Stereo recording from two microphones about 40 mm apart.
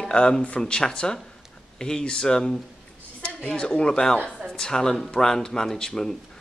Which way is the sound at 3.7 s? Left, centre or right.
Centre.